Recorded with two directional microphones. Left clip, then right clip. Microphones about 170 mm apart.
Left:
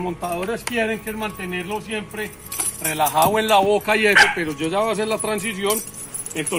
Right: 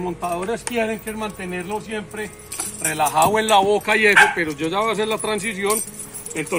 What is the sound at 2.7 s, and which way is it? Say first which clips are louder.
Jingle bell: right 1 dB; 5° left (ahead or behind).